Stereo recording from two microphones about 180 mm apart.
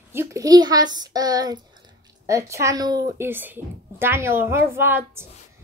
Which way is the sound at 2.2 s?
15° right (ahead or behind).